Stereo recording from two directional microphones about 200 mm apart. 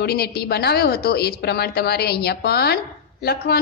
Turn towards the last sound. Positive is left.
turn(degrees=50)  # may be behind; listen again after turning